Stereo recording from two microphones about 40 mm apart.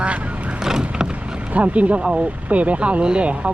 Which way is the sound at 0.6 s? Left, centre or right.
Centre.